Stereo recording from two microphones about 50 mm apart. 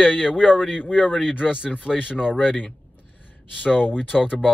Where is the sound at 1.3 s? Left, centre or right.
Left.